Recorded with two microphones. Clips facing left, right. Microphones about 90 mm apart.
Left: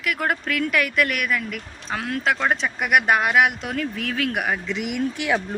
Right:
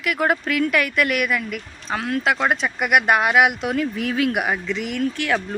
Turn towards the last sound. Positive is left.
turn(degrees=15)  # may be behind; listen again after turning